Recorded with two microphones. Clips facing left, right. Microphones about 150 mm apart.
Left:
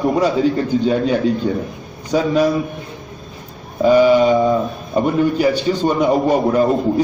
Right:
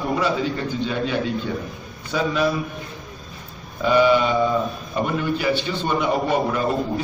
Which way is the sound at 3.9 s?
40° left (ahead or behind).